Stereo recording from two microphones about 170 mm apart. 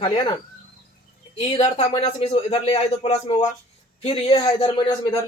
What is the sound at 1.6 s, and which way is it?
Speech, 30° left (ahead or behind).